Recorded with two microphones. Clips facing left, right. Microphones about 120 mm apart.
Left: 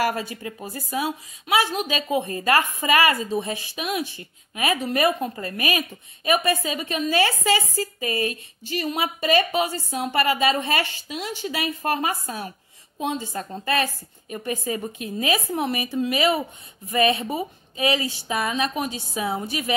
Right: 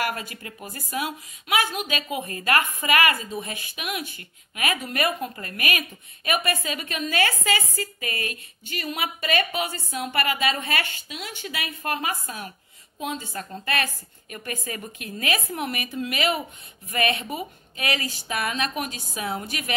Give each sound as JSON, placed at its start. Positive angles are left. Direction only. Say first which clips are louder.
{"t": 0.0, "sound": "a woman's voice", "louder": "left 5 dB", "side_deg": 30}